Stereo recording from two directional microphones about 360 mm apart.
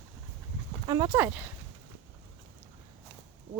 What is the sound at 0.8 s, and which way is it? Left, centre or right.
Speech, centre.